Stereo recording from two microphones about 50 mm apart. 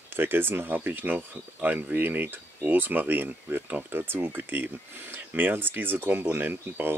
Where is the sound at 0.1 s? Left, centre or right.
Right.